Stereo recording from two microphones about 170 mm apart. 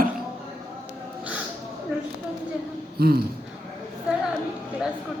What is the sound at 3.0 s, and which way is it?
Speech, 65° right (ahead or behind).